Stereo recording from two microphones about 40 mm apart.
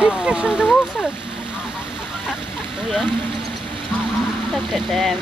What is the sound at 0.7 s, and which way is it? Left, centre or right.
Speech, centre.